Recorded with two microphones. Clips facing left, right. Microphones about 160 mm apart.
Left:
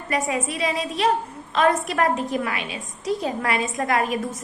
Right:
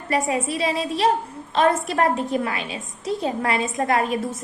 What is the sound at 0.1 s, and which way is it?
A woman's voice, 30° right (ahead or behind).